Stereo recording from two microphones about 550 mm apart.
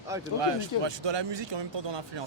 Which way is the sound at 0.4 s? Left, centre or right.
Right.